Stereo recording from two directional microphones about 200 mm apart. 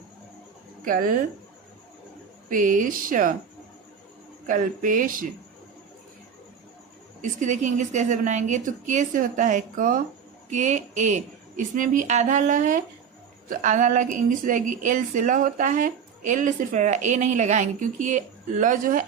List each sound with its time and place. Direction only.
0.9 s speech: 45° right (ahead or behind)
2.5 s a woman's voice: 40° right (ahead or behind)
4.4 s speech: 40° right (ahead or behind)
7.2 s a woman's voice: 40° right (ahead or behind)